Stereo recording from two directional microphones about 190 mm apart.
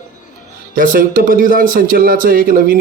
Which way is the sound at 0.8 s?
45° right (ahead or behind).